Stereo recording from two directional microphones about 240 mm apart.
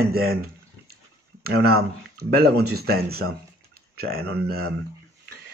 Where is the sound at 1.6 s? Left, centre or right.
Right.